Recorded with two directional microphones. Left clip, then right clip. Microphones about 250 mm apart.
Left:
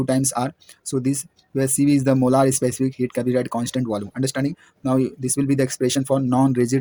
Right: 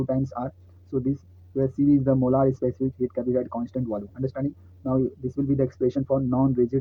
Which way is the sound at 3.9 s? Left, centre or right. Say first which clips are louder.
Left 5 dB; left.